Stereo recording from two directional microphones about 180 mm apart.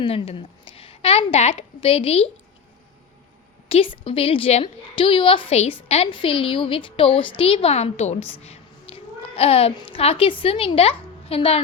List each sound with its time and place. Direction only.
0.0 s a woman's voice: 30° left (ahead or behind)
3.7 s a woman's voice: 30° left (ahead or behind)